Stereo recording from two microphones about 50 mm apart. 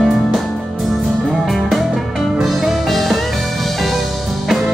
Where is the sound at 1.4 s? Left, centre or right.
Centre.